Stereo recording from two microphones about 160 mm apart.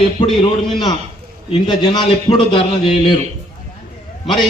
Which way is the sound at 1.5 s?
30° left (ahead or behind).